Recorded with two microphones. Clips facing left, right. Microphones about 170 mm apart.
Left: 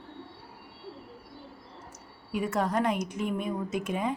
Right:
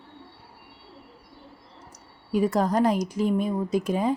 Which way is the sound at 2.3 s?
35° right (ahead or behind).